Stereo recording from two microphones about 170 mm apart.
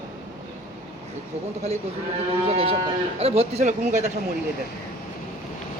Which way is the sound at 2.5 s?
35° right (ahead or behind).